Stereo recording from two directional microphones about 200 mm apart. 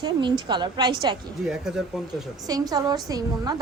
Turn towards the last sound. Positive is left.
turn(degrees=-20)  # may be behind; listen again after turning